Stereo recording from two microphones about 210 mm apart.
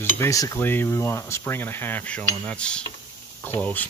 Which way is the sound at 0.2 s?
15° left (ahead or behind).